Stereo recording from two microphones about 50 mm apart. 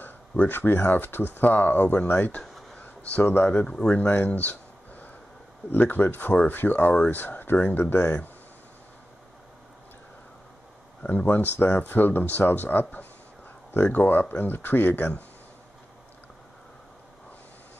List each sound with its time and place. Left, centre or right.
0.0 s a sound: left
0.8 s speech: left
3.6 s speech: centre
3.9 s a sound: left
5.9 s speech: left
11.0 s speech: left